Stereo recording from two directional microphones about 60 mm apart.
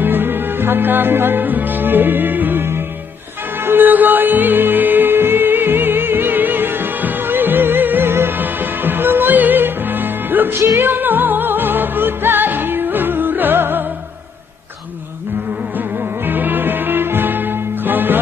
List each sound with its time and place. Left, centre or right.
0.0 s music: right
3.6 s music: right
16.3 s music: right